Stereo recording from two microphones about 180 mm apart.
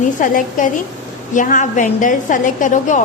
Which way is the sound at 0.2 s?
45° left (ahead or behind).